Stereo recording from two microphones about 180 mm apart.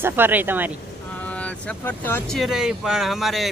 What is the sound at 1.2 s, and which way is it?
Vehicle, 5° left (ahead or behind).